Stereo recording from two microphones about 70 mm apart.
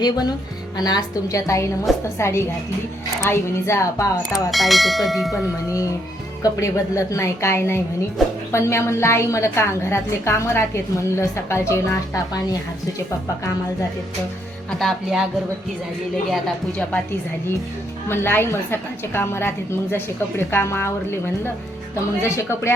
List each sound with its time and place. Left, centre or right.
0.0 s a woman's voice: left
4.5 s speech: centre
6.4 s a woman's voice: left
14.8 s speech: centre
18.1 s a woman's voice: left